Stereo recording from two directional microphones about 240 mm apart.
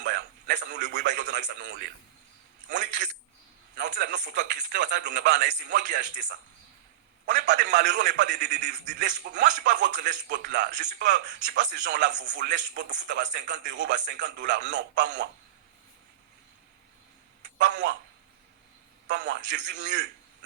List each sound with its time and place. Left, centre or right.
0.0 s a sound: right
0.6 s speech: right
3.8 s speech: right
17.7 s speech: right
19.0 s speech: right